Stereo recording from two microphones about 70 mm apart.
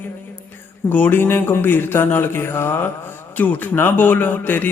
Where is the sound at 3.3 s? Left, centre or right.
Left.